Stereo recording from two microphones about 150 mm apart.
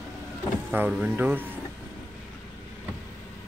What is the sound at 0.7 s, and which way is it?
Speech, 10° right (ahead or behind).